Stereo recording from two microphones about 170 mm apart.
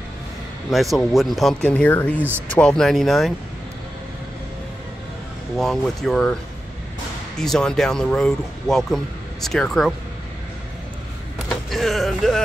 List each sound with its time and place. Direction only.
0.7 s speech: centre (ahead or behind)
5.6 s speech: centre (ahead or behind)
7.3 s speech: 5° left (ahead or behind)
11.4 s a sound: centre (ahead or behind)